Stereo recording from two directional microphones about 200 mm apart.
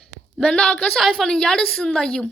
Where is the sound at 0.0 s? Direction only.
5° left (ahead or behind).